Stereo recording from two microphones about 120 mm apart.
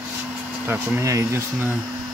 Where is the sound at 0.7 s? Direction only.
20° right (ahead or behind).